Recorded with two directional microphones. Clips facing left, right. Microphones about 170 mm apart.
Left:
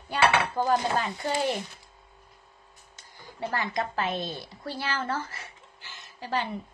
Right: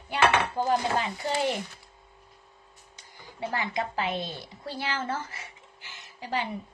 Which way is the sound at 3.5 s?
15° right (ahead or behind).